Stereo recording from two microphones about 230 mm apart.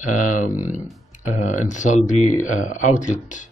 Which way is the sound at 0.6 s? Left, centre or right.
Centre.